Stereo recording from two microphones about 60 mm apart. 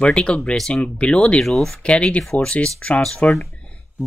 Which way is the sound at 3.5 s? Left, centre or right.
Left.